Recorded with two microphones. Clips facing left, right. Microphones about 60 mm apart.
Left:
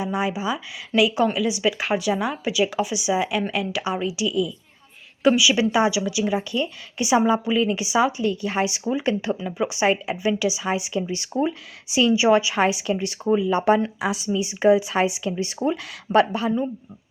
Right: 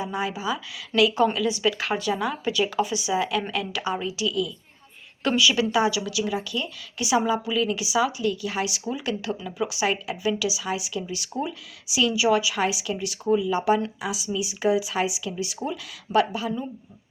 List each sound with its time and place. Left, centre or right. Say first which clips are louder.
0.0 s a woman's voice: left 3 dB; centre; by 16.5 s left